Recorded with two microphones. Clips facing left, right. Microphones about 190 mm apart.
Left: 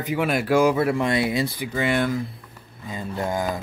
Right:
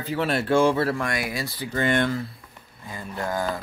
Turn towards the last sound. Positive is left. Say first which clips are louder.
# left 2 dB
turn(degrees=15)  # may be behind; listen again after turning